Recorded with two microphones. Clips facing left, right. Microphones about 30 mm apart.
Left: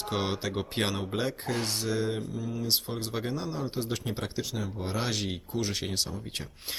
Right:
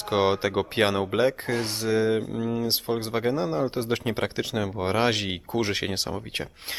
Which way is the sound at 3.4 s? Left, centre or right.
Right.